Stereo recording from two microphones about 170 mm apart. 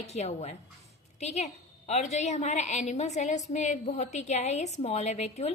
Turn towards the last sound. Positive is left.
turn(degrees=40)  # may be behind; listen again after turning